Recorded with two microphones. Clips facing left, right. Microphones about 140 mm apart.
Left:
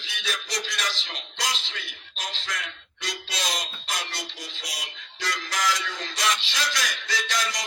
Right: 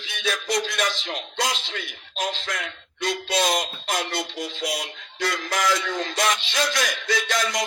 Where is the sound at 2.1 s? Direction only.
50° right (ahead or behind).